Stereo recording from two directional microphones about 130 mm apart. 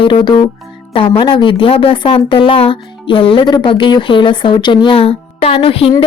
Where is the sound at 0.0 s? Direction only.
40° left (ahead or behind).